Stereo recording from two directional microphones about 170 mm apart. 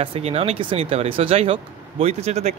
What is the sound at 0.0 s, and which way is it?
Speech, 35° right (ahead or behind).